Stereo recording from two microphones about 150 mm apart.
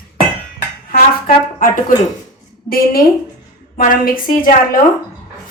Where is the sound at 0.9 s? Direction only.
75° left (ahead or behind).